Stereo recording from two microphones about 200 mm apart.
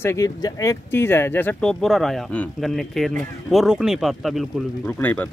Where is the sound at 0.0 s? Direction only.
15° left (ahead or behind).